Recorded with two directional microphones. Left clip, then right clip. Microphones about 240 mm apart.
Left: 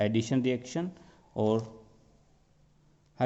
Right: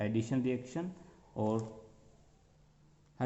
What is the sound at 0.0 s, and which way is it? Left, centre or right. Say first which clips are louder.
A man's voice: left 6 dB; left.